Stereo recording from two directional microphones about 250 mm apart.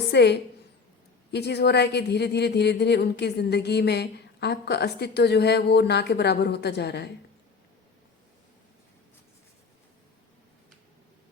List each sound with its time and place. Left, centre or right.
0.1 s a woman's voice: left